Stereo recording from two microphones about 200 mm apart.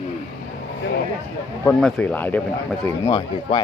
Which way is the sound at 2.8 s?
25° left (ahead or behind).